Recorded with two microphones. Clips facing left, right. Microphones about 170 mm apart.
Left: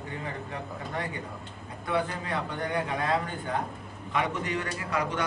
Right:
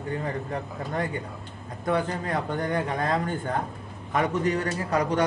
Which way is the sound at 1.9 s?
45° right (ahead or behind).